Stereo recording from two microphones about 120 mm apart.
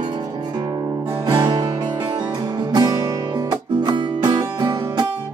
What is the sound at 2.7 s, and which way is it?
Music, 35° right (ahead or behind).